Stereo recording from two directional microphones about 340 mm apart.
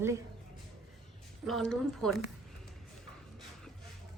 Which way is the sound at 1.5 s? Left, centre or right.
Centre.